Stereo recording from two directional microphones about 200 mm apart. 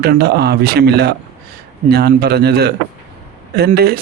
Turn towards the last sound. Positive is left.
turn(degrees=-50)  # may be behind; listen again after turning